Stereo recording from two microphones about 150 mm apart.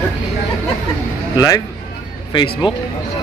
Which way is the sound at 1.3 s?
25° left (ahead or behind).